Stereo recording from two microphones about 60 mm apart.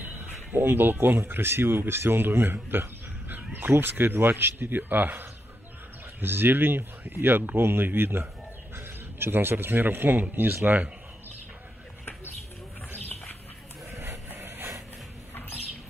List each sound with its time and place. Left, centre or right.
0.0 s speech: right
13.9 s vehicle: right